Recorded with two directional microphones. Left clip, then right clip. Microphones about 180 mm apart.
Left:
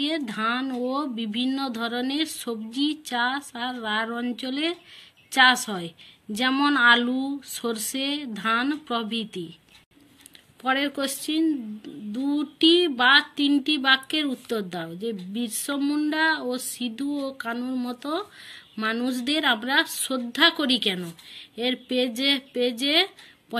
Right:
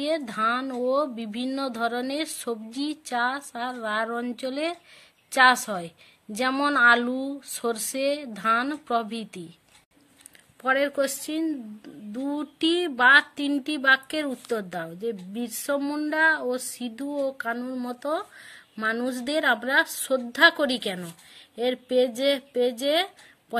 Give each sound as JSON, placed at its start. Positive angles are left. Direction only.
{"t": 0.0, "sound": "a woman's voice", "side_deg": -50}
{"t": 10.6, "sound": "speech", "side_deg": -45}
{"t": 21.4, "sound": "a sound", "side_deg": -45}
{"t": 22.2, "sound": "speech", "side_deg": -45}